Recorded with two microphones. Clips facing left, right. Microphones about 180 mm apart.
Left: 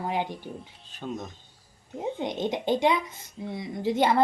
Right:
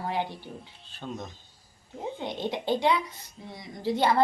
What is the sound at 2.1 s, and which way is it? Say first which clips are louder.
A child's voice: left 2 dB; 20° left (ahead or behind).